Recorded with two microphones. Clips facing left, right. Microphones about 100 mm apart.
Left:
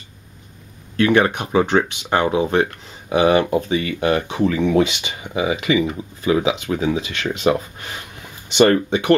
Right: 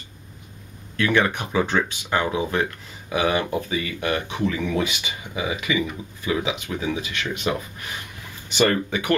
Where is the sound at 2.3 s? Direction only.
30° left (ahead or behind).